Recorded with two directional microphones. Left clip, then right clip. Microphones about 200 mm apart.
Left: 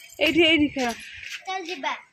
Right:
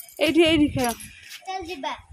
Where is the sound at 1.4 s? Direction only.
15° right (ahead or behind).